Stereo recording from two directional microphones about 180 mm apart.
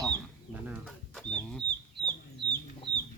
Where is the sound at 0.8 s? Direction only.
5° left (ahead or behind).